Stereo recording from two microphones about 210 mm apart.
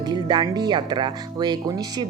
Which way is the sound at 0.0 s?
20° right (ahead or behind).